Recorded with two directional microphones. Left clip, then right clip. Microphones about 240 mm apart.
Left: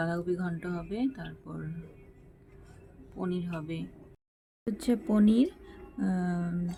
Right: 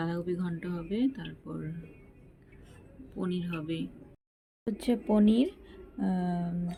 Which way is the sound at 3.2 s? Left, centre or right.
Centre.